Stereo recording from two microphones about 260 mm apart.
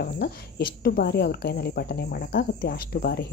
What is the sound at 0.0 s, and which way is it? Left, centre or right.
Speech, left.